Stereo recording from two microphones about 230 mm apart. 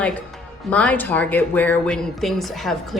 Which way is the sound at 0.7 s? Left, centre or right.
Centre.